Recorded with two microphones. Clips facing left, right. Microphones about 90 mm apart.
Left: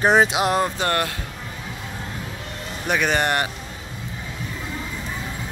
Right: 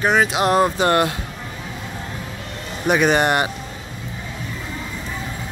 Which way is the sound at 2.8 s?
15° right (ahead or behind).